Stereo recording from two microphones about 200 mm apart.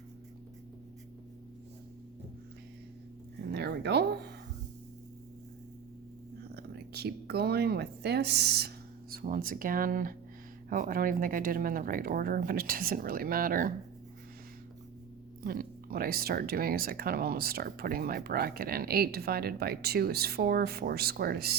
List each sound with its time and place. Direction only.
3.5 s a sound: 55° right (ahead or behind)
6.6 s a woman's voice: 55° right (ahead or behind)
15.4 s speech: 45° right (ahead or behind)